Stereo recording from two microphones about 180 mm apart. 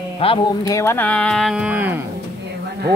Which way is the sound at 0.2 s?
30° left (ahead or behind).